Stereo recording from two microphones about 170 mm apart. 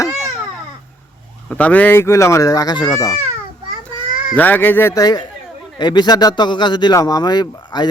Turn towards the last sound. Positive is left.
turn(degrees=25)  # may be behind; listen again after turning